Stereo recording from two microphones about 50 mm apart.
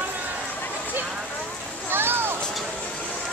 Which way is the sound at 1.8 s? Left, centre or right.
Right.